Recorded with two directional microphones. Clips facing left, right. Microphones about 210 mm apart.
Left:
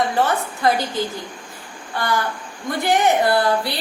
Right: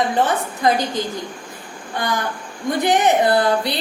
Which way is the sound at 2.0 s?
15° right (ahead or behind).